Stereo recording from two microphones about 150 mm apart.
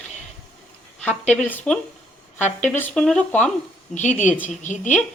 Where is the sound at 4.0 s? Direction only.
55° left (ahead or behind).